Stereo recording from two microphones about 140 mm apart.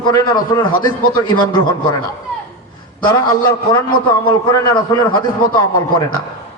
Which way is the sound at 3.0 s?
25° left (ahead or behind).